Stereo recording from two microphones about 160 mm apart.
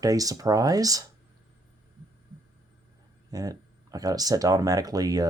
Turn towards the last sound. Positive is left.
turn(degrees=-25)  # may be behind; listen again after turning